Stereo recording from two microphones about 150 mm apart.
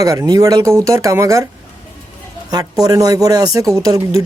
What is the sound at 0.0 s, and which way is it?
Speech, 20° right (ahead or behind).